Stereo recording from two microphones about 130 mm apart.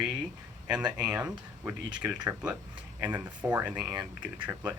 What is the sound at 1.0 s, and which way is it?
Speech, 10° right (ahead or behind).